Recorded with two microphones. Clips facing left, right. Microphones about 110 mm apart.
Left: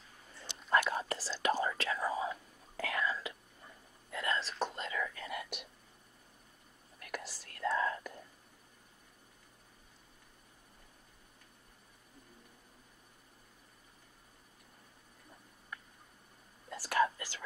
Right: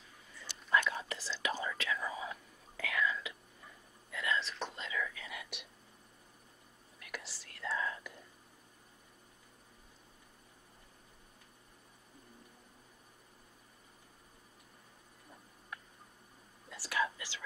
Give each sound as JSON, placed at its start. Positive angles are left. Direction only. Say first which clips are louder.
{"t": 0.7, "sound": "whispering", "louder": "left 2 dB", "side_deg": 45}
{"t": 7.0, "sound": "whispering", "louder": "left 4 dB", "side_deg": 45}
{"t": 16.7, "sound": "whispering", "louder": "left 5 dB", "side_deg": 45}